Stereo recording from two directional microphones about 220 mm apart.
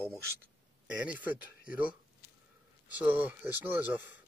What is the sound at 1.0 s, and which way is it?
Speech, 5° right (ahead or behind).